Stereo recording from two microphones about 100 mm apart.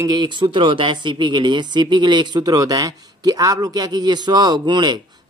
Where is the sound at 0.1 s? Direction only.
50° right (ahead or behind).